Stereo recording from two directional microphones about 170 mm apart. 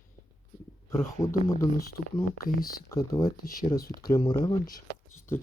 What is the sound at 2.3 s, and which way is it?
Speech, 60° left (ahead or behind).